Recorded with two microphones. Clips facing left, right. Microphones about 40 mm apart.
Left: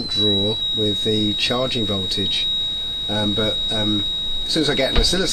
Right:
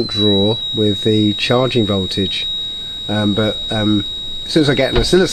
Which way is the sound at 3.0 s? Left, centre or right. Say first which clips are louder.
Right 6 dB; centre.